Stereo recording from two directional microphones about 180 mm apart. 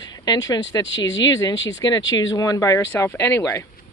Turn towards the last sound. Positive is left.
turn(degrees=15)  # may be behind; listen again after turning